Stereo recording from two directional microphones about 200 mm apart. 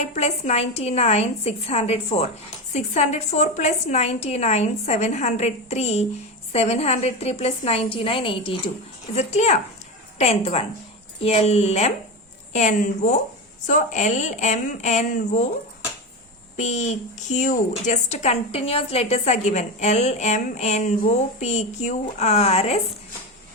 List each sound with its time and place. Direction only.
0.0 s a woman's voice: 35° left (ahead or behind)
16.6 s a woman's voice: 35° left (ahead or behind)